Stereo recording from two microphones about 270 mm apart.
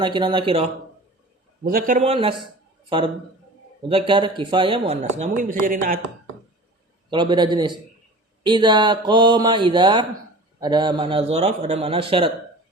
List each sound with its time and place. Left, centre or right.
0.0 s speech: centre
1.6 s speech: right
7.1 s speech: centre